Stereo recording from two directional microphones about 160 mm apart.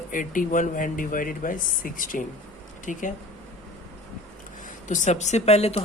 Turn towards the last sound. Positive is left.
turn(degrees=40)  # may be behind; listen again after turning